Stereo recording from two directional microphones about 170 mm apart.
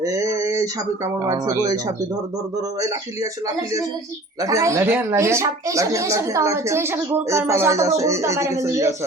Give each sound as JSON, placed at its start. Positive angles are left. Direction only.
{"t": 0.0, "sound": "a sound", "side_deg": -20}
{"t": 1.2, "sound": "speech", "side_deg": -20}
{"t": 4.4, "sound": "speech", "side_deg": -20}